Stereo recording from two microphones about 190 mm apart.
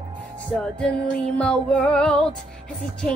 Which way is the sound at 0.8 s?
5° left (ahead or behind).